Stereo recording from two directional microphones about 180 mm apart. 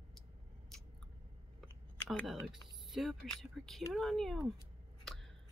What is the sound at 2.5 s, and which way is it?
Speech, centre (ahead or behind).